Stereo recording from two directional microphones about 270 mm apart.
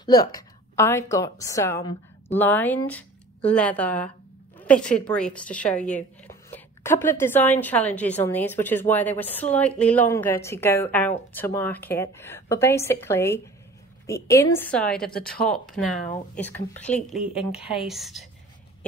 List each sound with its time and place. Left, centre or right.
0.0 s a woman's voice: centre
15.1 s speech: left
15.5 s speech: centre